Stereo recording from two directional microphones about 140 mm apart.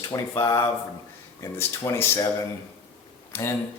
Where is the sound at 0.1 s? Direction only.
25° left (ahead or behind).